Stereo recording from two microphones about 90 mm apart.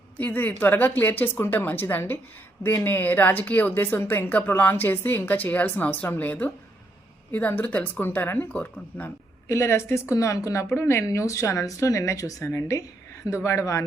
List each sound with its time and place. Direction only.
0.2 s speech: 20° left (ahead or behind)
9.5 s a woman's voice: 30° left (ahead or behind)